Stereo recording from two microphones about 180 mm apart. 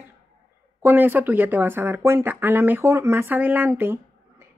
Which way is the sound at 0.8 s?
10° right (ahead or behind).